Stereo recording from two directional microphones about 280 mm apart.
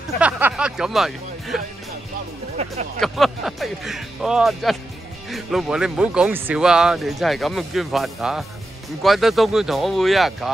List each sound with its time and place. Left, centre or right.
0.2 s speech: centre
2.5 s speech: right
3.0 s speech: centre